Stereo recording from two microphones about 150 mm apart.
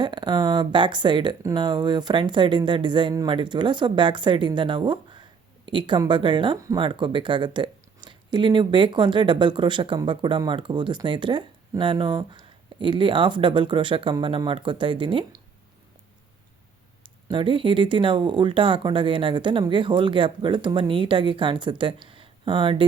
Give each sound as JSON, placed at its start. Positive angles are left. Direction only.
{"t": 0.0, "sound": "speech", "side_deg": -30}
{"t": 17.2, "sound": "speech", "side_deg": -35}